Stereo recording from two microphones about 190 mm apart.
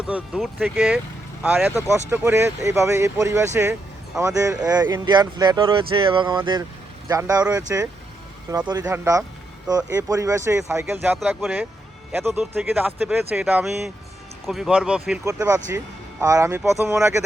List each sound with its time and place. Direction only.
0.0 s speech: centre (ahead or behind)
1.4 s speech: 10° right (ahead or behind)
15.2 s speech: 15° right (ahead or behind)